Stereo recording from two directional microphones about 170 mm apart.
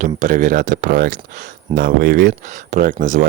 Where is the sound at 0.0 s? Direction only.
50° right (ahead or behind).